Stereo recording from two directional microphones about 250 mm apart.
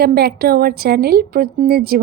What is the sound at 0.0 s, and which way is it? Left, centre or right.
A woman's voice, right.